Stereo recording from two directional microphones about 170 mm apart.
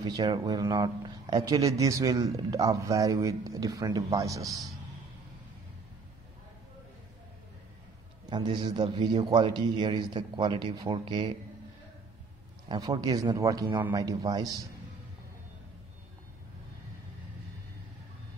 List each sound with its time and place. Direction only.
0.0 s speech: 25° right (ahead or behind)
8.3 s speech: 25° right (ahead or behind)
12.6 s speech: 25° right (ahead or behind)